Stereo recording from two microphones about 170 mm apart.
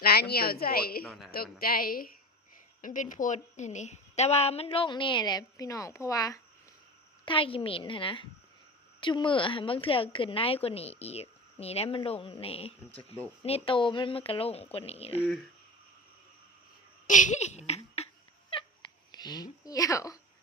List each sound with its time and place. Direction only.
0.0 s a woman's voice: 65° left (ahead or behind)
1.0 s a woman's voice: 5° left (ahead or behind)
1.3 s a woman's voice: 60° left (ahead or behind); by 6.4 s 20° left (ahead or behind)
7.3 s a woman's voice: 30° left (ahead or behind)
17.1 s speech: 45° left (ahead or behind)
19.1 s speech: 25° left (ahead or behind)